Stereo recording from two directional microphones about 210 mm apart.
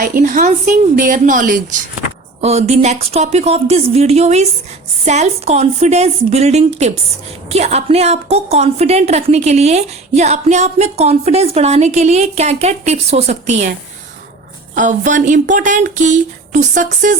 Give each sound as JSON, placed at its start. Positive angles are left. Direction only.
{"t": 0.0, "sound": "a woman's voice", "side_deg": -40}
{"t": 14.8, "sound": "a woman's voice", "side_deg": -35}